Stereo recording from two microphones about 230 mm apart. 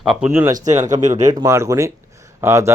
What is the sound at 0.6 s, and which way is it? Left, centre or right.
Speech, right.